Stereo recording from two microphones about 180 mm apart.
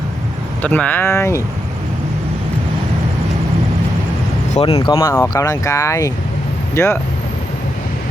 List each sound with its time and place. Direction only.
0.6 s speech: 10° left (ahead or behind)
4.5 s speech: 35° left (ahead or behind)
4.9 s speech: 15° left (ahead or behind)